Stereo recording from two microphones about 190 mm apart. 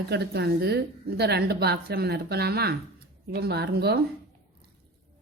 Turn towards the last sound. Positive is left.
turn(degrees=-60)  # may be behind; listen again after turning